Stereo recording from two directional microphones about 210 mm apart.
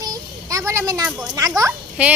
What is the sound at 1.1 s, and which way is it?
Speech, centre (ahead or behind).